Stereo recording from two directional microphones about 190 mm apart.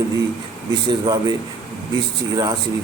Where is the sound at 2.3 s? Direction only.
20° right (ahead or behind).